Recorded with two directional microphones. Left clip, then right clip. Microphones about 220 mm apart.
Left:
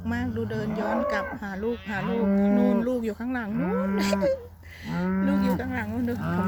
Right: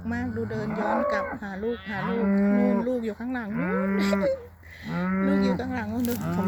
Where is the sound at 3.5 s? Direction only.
20° right (ahead or behind).